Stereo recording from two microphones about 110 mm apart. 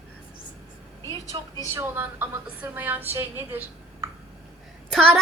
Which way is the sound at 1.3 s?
45° right (ahead or behind).